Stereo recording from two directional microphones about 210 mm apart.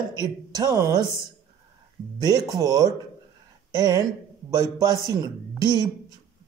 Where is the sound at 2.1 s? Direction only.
20° right (ahead or behind).